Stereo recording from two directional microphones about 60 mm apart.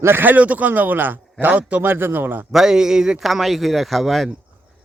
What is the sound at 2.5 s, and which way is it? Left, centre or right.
A man's voice, centre.